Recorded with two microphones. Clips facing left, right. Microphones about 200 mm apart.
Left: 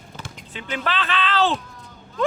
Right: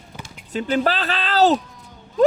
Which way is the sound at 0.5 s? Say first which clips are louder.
Right 7 dB; 40° right (ahead or behind).